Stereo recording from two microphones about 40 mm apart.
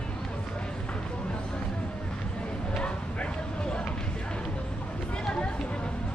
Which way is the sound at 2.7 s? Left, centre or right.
Left.